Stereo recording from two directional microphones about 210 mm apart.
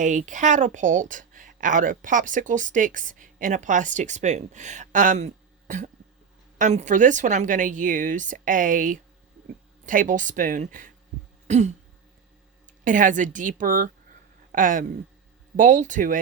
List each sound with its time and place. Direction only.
0.0 s a woman's voice: 35° right (ahead or behind)
11.4 s throat clearing: 35° right (ahead or behind)
12.8 s a woman's voice: 40° right (ahead or behind)